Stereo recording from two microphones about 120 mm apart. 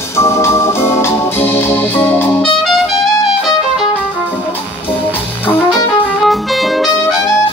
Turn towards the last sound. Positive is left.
turn(degrees=0)  # may be behind; listen again after turning